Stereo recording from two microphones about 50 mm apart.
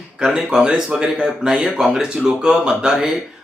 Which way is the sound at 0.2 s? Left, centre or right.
Centre.